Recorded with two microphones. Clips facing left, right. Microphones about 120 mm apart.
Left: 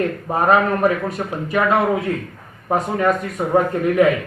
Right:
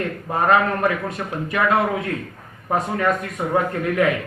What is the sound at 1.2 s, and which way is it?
Speech, 30° left (ahead or behind).